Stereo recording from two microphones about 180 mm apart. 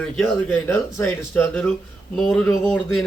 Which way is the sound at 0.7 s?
10° left (ahead or behind).